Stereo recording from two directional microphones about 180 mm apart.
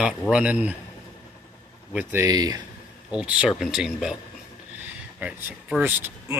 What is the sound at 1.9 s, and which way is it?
Speech, 15° right (ahead or behind).